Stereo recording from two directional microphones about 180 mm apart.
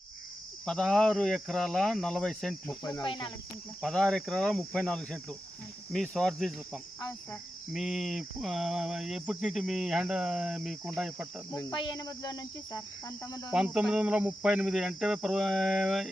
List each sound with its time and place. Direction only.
0.6 s cricket: centre (ahead or behind)
2.9 s cricket: 25° left (ahead or behind)
3.8 s cricket: centre (ahead or behind)
7.0 s insect: 15° left (ahead or behind)
7.7 s cricket: centre (ahead or behind)
11.5 s cricket: 25° left (ahead or behind)
13.5 s cricket: 5° right (ahead or behind)